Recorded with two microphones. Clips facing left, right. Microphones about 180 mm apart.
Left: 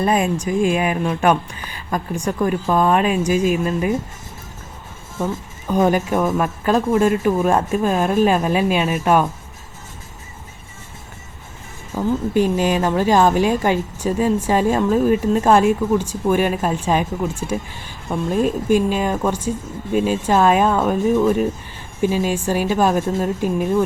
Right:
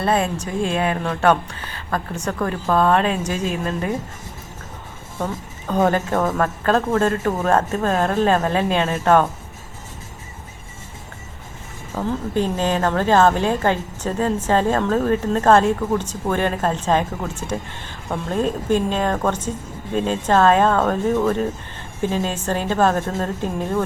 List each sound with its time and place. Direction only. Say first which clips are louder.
0.0 s a woman's voice: left 2 dB; 15° left (ahead or behind)
5.6 s a woman's voice: left 2 dB; 10° left (ahead or behind)
11.9 s a woman's voice: left 4 dB; 10° left (ahead or behind)